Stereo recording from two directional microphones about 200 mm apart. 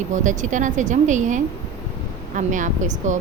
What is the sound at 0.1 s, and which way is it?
Speech, 40° right (ahead or behind).